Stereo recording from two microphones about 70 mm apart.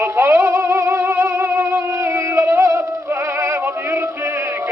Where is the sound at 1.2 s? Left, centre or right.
Right.